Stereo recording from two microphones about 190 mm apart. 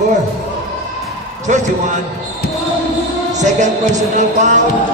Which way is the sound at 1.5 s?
40° right (ahead or behind).